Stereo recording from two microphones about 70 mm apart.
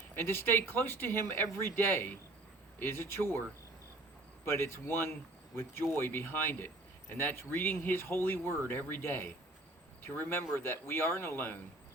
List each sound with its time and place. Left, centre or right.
0.2 s speech: left
4.4 s speech: left